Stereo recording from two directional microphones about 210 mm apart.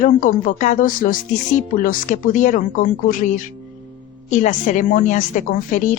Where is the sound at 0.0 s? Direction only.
40° left (ahead or behind).